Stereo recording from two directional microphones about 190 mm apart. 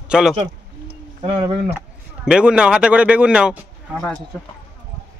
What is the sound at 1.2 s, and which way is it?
Speech, 25° right (ahead or behind).